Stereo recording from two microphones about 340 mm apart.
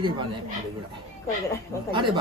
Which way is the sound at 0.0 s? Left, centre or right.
Centre.